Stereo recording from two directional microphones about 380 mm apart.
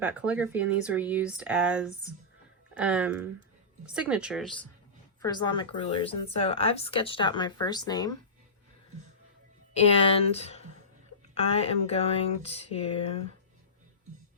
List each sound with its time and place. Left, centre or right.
0.0 s speech: centre
9.7 s speech: centre